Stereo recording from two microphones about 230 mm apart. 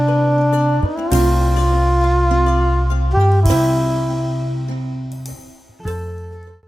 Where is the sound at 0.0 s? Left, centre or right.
Centre.